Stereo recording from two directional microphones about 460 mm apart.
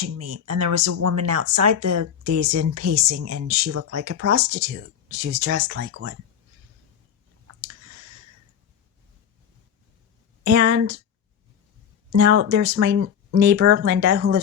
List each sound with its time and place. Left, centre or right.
0.0 s speech: right
5.2 s speech: right
10.4 s speech: right
12.1 s speech: right
12.6 s speech: right